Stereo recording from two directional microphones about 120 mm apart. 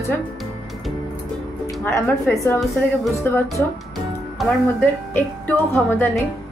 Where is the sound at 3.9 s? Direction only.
Centre (ahead or behind).